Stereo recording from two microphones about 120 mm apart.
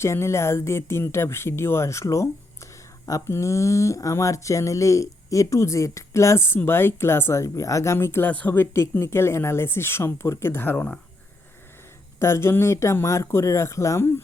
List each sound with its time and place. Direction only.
0.0 s speech: 20° left (ahead or behind)
12.2 s speech: 20° left (ahead or behind)